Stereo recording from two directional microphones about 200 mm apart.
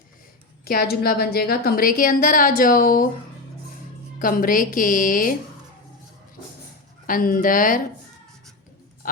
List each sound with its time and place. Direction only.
0.6 s a woman's voice: 50° left (ahead or behind)
4.2 s a woman's voice: 45° left (ahead or behind)
7.1 s a woman's voice: 45° left (ahead or behind)